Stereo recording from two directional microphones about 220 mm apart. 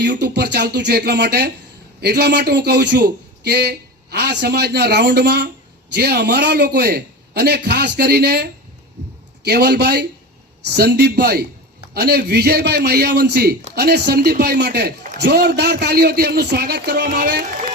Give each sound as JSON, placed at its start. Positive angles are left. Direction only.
{"t": 0.0, "sound": "a man's voice", "side_deg": -50}